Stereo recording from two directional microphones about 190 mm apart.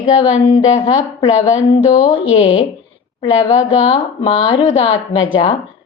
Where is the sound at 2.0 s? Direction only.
30° left (ahead or behind).